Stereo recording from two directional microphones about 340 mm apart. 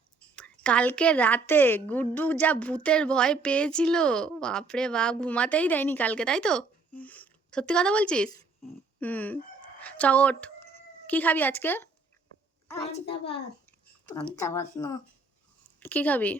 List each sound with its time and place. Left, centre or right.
0.3 s a woman's voice: centre
14.2 s a woman's voice: centre